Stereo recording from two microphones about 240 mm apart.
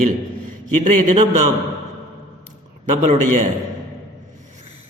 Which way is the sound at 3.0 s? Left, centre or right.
Right.